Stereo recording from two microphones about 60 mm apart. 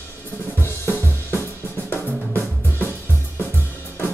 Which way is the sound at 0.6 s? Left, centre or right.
Left.